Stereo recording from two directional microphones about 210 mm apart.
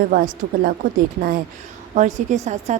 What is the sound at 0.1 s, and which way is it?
Speech, 40° right (ahead or behind).